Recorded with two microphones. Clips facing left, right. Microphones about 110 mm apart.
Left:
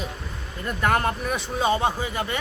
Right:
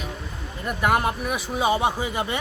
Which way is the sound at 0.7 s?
15° right (ahead or behind).